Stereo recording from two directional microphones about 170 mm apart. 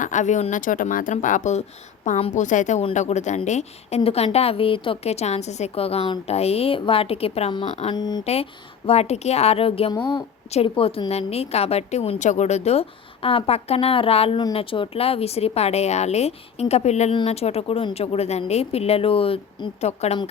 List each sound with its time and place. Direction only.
0.0 s a woman's voice: 45° left (ahead or behind); by 8.2 s 25° left (ahead or behind)
8.2 s a woman's voice: 40° left (ahead or behind)